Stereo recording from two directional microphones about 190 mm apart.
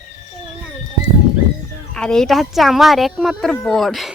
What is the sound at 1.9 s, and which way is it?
Speech, 5° left (ahead or behind).